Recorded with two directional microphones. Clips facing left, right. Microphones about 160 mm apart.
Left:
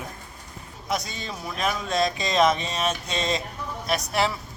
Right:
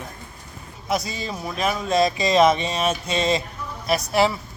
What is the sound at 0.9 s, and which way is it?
Speech, 5° right (ahead or behind).